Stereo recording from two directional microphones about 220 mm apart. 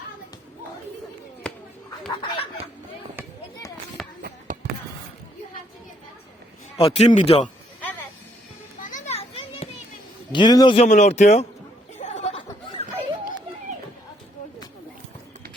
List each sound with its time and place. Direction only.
1.5 s a sound: 5° left (ahead or behind)
2.0 s a man's voice: 25° left (ahead or behind)
4.0 s run: centre (ahead or behind)
6.7 s a man's voice: 25° left (ahead or behind)
8.8 s children playing: 35° left (ahead or behind)
10.3 s a man's voice: 20° left (ahead or behind)
10.8 s speech: 30° left (ahead or behind)
11.9 s chatter: 30° left (ahead or behind)